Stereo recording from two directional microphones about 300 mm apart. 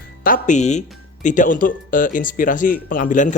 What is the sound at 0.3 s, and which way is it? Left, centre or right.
A man's voice, left.